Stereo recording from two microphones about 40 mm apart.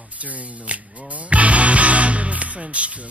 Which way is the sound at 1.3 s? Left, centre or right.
Right.